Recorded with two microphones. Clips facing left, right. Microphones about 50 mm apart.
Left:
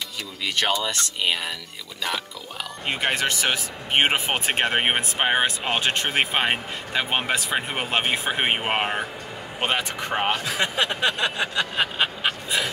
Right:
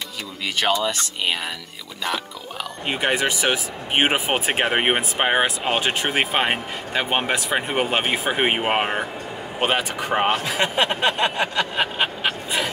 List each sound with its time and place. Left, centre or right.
0.8 s speech: centre
2.9 s speech: centre
10.3 s speech: right